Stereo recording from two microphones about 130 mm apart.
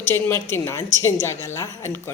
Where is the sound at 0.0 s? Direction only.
20° left (ahead or behind).